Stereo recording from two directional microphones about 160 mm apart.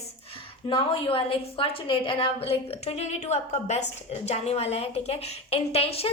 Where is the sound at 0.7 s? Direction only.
30° left (ahead or behind).